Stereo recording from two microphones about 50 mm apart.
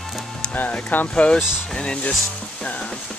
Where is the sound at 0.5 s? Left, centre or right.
Left.